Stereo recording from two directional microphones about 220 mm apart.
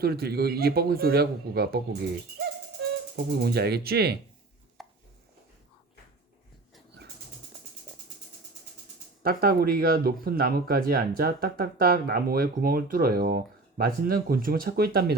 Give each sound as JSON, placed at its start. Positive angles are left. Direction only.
{"t": 0.0, "sound": "speech", "side_deg": -45}
{"t": 3.2, "sound": "speech", "side_deg": -45}
{"t": 4.8, "sound": "chopping", "side_deg": 0}
{"t": 9.2, "sound": "speech", "side_deg": -45}